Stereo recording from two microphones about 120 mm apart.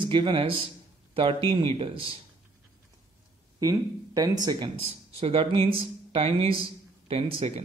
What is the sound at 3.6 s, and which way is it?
Speech, 30° right (ahead or behind).